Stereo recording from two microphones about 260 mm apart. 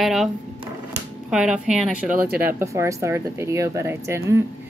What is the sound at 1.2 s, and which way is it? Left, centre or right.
Speech, centre.